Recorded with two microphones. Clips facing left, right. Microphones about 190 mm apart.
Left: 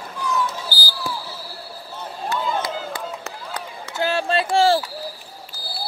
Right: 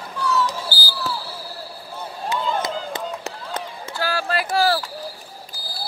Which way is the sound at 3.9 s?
25° left (ahead or behind).